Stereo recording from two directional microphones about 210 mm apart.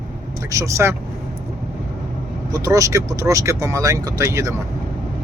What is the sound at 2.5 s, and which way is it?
Speech, 15° right (ahead or behind).